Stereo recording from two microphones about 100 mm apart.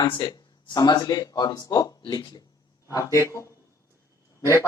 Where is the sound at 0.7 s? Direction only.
40° left (ahead or behind).